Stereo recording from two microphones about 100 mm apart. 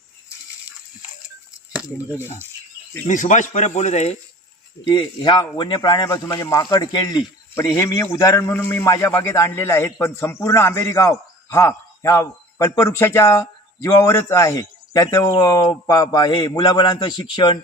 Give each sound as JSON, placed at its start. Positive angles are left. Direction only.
{"t": 1.7, "sound": "speech", "side_deg": -10}
{"t": 4.8, "sound": "speech", "side_deg": 55}
{"t": 6.1, "sound": "a man's voice", "side_deg": 35}
{"t": 7.5, "sound": "a man's voice", "side_deg": 30}